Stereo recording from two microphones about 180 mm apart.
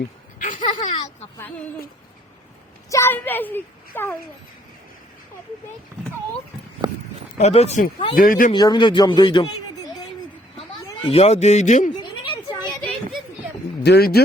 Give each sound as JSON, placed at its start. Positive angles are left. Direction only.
{"t": 0.3, "sound": "a sound", "side_deg": 45}
{"t": 2.9, "sound": "a woman's voice", "side_deg": 15}
{"t": 7.3, "sound": "a man's voice", "side_deg": 35}
{"t": 8.1, "sound": "speech", "side_deg": 50}
{"t": 8.5, "sound": "speech", "side_deg": 25}
{"t": 11.0, "sound": "a man's voice", "side_deg": 35}
{"t": 11.9, "sound": "a sound", "side_deg": 25}
{"t": 13.8, "sound": "speech", "side_deg": 60}